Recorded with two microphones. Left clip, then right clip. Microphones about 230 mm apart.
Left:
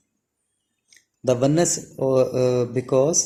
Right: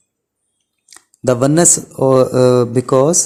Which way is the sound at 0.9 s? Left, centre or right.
Right.